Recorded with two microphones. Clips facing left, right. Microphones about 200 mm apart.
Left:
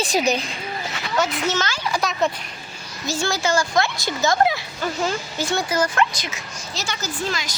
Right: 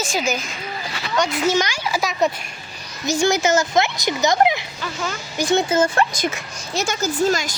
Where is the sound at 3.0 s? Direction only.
20° right (ahead or behind).